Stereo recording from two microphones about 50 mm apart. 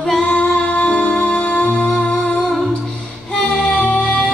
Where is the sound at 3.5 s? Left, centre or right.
Centre.